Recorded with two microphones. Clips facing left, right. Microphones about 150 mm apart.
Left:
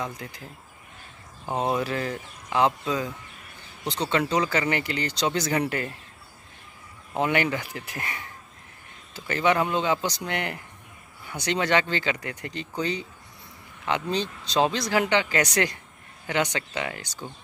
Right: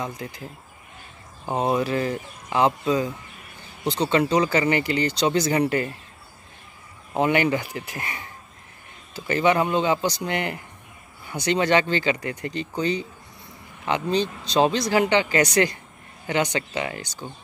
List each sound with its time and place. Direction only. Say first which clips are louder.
1.4 s speech: right 3 dB; 10° right (ahead or behind)
2.5 s speech: right 3 dB; 5° right (ahead or behind)
7.2 s speech: right 4 dB; 10° right (ahead or behind)
16.3 s speech: right 3 dB; 5° right (ahead or behind)